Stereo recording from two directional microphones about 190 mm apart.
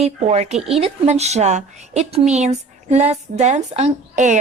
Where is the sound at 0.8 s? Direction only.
35° right (ahead or behind).